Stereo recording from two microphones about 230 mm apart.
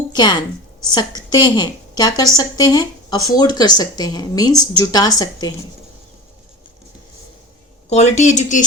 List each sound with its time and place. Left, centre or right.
0.1 s a woman's voice: centre
7.9 s speech: left